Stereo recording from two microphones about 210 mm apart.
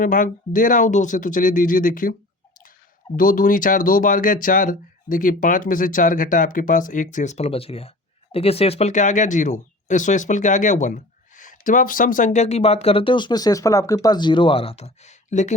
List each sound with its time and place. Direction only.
0.0 s speech: 40° left (ahead or behind)
3.2 s speech: 40° left (ahead or behind)